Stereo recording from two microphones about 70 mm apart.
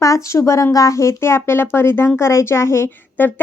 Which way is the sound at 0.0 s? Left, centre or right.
Left.